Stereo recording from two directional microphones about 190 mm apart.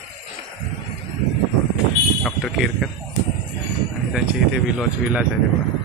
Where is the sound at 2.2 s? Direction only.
Centre (ahead or behind).